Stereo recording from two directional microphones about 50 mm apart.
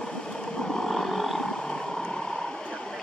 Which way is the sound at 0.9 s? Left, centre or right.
Centre.